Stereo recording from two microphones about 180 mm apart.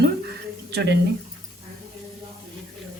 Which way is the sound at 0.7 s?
65° right (ahead or behind).